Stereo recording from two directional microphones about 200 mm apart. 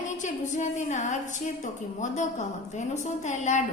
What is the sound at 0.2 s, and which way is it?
A woman's voice, 40° left (ahead or behind).